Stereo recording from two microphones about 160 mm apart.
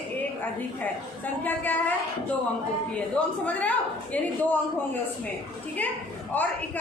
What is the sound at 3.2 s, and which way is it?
Speech, 10° left (ahead or behind).